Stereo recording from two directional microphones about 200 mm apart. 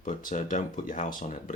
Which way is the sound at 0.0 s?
40° left (ahead or behind).